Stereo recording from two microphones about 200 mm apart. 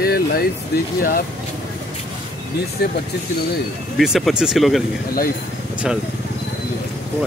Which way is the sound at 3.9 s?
Centre (ahead or behind).